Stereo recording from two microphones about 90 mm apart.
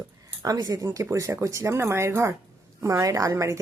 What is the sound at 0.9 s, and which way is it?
A woman's voice, 30° right (ahead or behind).